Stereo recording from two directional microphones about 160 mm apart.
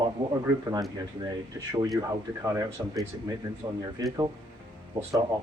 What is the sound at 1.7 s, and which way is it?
Speech, 20° right (ahead or behind).